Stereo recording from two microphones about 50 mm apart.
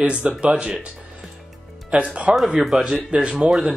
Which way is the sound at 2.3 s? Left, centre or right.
Right.